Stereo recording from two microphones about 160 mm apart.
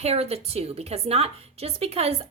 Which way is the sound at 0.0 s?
40° right (ahead or behind).